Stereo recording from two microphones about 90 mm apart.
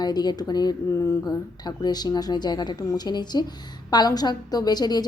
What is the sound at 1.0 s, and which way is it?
Speech, 35° left (ahead or behind).